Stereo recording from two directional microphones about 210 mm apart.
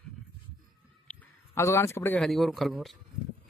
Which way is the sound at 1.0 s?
5° left (ahead or behind).